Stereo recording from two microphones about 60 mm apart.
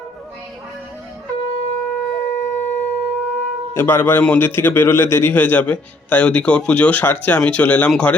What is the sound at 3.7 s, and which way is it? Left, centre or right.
Speech, left.